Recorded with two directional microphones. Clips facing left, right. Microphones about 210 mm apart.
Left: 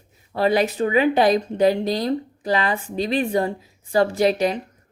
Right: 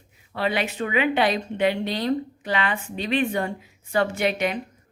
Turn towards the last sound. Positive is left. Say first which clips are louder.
# left 5 dB
turn(degrees=35)  # may be behind; listen again after turning